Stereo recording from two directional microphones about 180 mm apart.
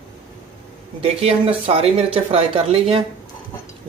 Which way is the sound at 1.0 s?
35° right (ahead or behind).